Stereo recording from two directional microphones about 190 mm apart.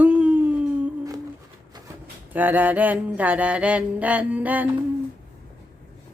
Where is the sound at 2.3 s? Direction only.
10° right (ahead or behind).